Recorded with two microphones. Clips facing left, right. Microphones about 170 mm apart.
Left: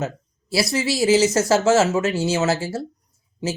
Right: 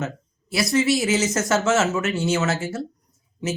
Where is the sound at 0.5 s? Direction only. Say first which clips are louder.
Right 2 dB; 35° left (ahead or behind).